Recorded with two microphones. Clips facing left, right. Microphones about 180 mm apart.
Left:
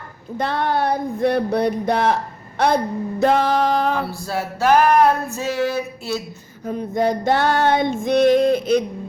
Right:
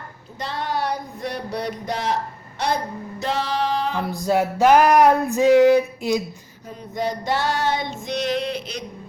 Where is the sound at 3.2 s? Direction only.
50° left (ahead or behind).